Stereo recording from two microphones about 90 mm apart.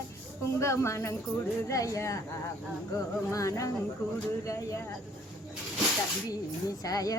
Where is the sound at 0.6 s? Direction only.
35° left (ahead or behind).